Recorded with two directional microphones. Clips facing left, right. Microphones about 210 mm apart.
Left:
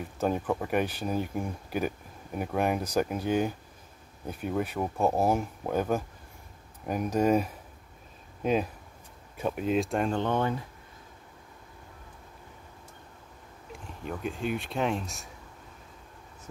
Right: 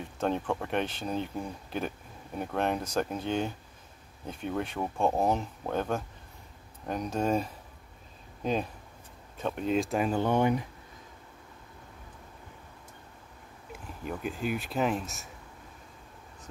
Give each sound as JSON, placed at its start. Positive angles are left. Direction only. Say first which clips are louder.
{"t": 0.0, "sound": "speech", "louder": "left 1 dB", "side_deg": 5}
{"t": 13.7, "sound": "speech", "louder": "even", "side_deg": -5}